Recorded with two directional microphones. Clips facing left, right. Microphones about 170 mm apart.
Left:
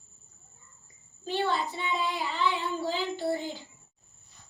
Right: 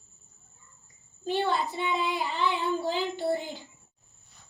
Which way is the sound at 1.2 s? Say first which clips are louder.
Right 2 dB; 20° right (ahead or behind).